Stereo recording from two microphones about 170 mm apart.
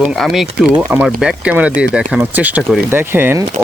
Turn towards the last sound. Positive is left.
turn(degrees=-15)  # may be behind; listen again after turning